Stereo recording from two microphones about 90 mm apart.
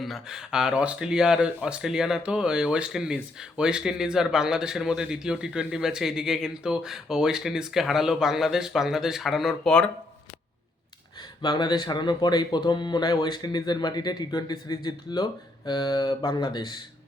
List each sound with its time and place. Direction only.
0.0 s a man's voice: 5° right (ahead or behind)
9.6 s speech: 10° left (ahead or behind)
11.4 s speech: 55° left (ahead or behind)